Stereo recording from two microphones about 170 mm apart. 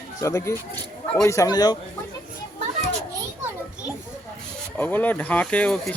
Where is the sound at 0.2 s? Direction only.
15° left (ahead or behind).